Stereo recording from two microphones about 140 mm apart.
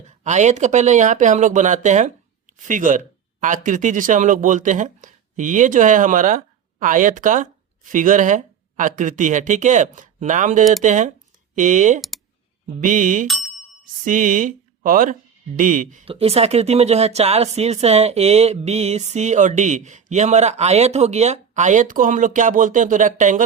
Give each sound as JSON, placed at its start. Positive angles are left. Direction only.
{"t": 0.3, "sound": "speech", "side_deg": -55}
{"t": 11.9, "sound": "computer keyboard", "side_deg": 0}
{"t": 12.8, "sound": "speech", "side_deg": -65}
{"t": 13.2, "sound": "a sound", "side_deg": 0}
{"t": 14.0, "sound": "speech", "side_deg": -70}
{"t": 16.0, "sound": "speech", "side_deg": -45}